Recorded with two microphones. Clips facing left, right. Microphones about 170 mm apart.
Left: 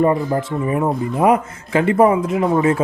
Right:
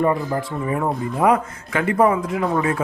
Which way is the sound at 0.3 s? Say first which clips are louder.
Left 4 dB; 25° left (ahead or behind).